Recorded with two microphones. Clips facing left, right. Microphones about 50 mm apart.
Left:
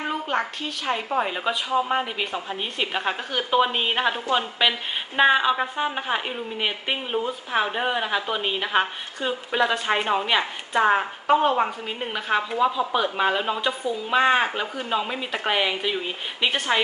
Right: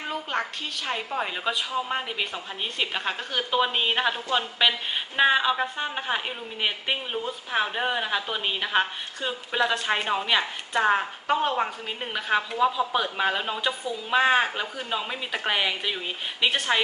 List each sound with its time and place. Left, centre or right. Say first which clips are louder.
0.0 s a woman's voice: left 4 dB; centre